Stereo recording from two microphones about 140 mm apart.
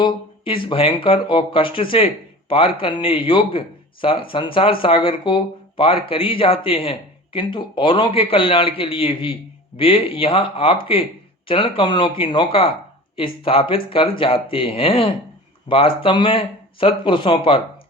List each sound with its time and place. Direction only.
0.0 s speech: 35° left (ahead or behind)